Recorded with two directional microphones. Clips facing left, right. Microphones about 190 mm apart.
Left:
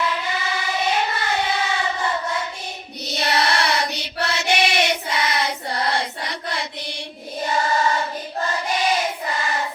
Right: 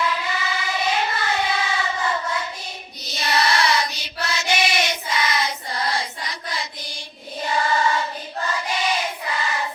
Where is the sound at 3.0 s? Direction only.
65° left (ahead or behind).